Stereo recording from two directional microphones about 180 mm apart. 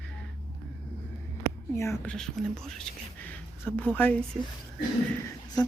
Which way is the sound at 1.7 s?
15° left (ahead or behind).